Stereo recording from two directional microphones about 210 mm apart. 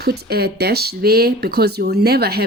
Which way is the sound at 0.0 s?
50° right (ahead or behind).